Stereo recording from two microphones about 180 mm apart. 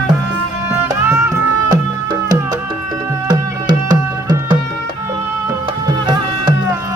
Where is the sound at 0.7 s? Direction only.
15° right (ahead or behind).